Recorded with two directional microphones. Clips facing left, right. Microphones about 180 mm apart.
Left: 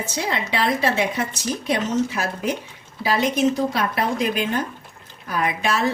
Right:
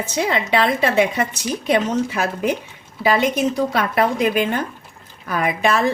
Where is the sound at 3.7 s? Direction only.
55° right (ahead or behind).